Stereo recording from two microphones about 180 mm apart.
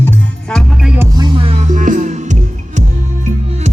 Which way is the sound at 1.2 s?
30° right (ahead or behind).